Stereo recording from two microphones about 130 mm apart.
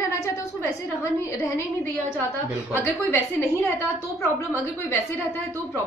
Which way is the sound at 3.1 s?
20° left (ahead or behind).